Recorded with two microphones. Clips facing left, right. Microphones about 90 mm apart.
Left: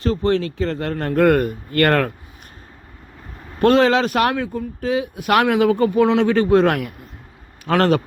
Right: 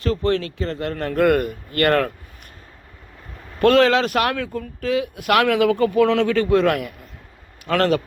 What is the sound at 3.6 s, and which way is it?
Speech, 25° left (ahead or behind).